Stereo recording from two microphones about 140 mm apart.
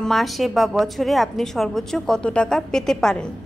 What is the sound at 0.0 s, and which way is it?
A woman's voice, centre (ahead or behind).